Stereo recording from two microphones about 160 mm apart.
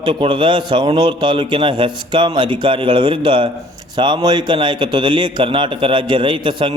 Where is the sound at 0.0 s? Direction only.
30° right (ahead or behind).